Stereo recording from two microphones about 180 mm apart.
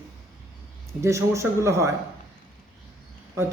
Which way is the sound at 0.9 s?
15° right (ahead or behind).